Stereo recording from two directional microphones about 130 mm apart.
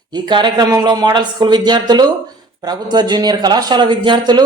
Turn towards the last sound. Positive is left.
turn(degrees=-35)  # may be behind; listen again after turning